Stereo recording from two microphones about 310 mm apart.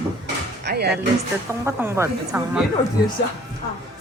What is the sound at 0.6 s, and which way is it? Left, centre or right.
Speech, right.